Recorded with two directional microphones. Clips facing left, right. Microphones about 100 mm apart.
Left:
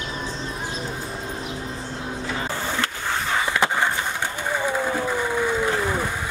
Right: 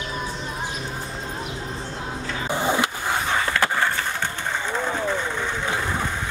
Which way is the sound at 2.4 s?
15° right (ahead or behind).